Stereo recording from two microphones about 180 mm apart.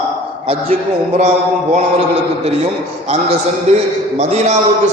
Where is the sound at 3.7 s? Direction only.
35° right (ahead or behind).